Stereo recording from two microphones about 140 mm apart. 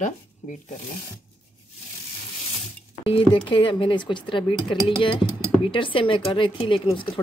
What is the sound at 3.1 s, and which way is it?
Speech, 35° left (ahead or behind).